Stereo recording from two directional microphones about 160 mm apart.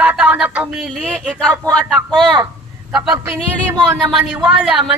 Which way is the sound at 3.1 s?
15° right (ahead or behind).